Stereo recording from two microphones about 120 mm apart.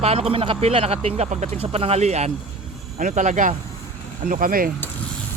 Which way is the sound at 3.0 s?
85° right.